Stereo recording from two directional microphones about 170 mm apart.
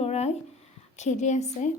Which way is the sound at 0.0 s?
40° left (ahead or behind).